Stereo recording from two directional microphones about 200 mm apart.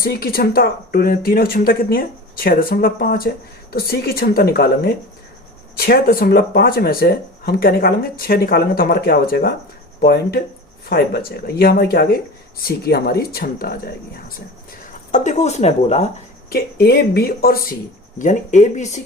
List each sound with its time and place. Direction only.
0.0 s speech: 50° left (ahead or behind)
15.1 s speech: 35° left (ahead or behind)
16.5 s speech: 55° left (ahead or behind)
18.2 s speech: 40° left (ahead or behind)